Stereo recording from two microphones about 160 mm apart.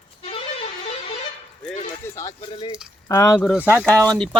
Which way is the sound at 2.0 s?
20° left (ahead or behind).